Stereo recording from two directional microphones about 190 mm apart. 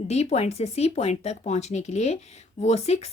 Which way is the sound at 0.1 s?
35° left (ahead or behind).